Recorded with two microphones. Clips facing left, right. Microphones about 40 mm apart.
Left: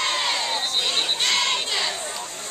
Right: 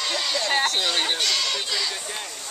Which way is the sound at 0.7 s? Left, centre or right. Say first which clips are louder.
Right 1 dB; left.